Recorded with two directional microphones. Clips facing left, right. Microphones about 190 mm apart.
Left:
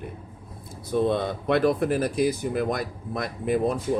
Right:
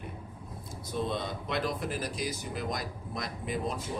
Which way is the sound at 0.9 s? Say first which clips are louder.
Left 10 dB; 55° left (ahead or behind).